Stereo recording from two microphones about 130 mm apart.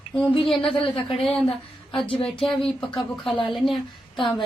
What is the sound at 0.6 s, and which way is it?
Speech, 45° left (ahead or behind).